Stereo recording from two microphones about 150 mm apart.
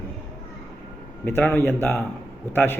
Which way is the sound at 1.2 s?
10° left (ahead or behind).